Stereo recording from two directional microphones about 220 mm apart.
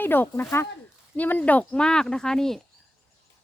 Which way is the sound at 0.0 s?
10° left (ahead or behind).